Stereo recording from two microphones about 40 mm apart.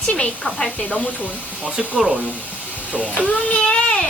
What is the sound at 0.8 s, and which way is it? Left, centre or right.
Speech, left.